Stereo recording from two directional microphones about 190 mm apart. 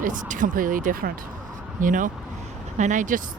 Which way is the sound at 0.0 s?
45° right (ahead or behind).